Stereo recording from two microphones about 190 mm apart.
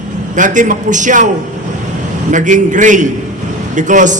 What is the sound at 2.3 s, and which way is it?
A man's voice, 40° right (ahead or behind).